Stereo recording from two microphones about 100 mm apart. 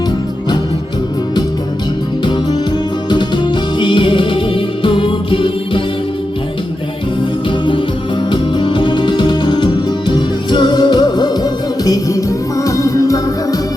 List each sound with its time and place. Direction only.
3.1 s music: 50° left (ahead or behind)
8.3 s music: 55° left (ahead or behind); by 13.6 s 35° left (ahead or behind)